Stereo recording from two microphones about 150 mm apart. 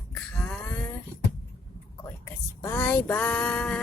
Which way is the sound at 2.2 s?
15° left (ahead or behind).